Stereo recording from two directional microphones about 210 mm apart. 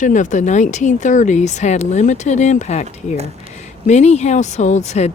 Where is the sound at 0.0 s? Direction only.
35° left (ahead or behind).